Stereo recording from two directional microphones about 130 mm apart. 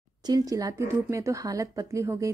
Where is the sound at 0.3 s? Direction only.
30° right (ahead or behind).